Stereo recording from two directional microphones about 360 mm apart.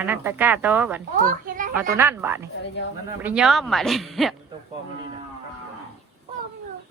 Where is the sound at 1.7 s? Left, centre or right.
Centre.